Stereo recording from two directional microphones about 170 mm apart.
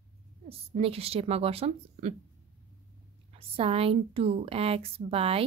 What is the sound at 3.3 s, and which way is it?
A woman's voice, 35° right (ahead or behind).